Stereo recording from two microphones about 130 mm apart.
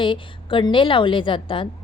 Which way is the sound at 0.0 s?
40° left (ahead or behind).